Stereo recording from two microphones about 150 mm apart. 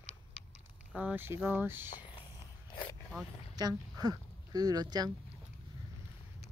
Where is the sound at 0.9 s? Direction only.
10° right (ahead or behind).